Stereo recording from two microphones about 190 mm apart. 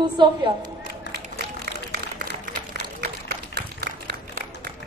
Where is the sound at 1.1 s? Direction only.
60° right (ahead or behind).